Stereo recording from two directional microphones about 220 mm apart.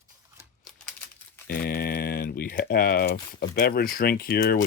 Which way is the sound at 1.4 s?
40° left (ahead or behind).